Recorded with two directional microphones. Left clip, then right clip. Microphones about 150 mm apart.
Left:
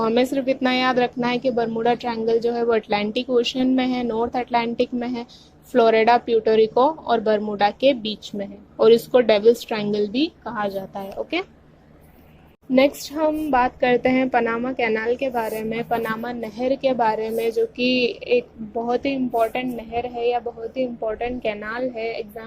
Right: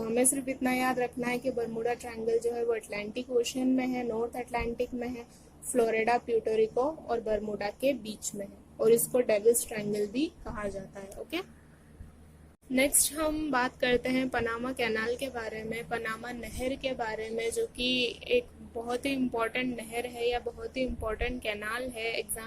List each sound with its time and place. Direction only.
0.0 s a woman's voice: 20° left (ahead or behind)
12.7 s a woman's voice: 20° left (ahead or behind)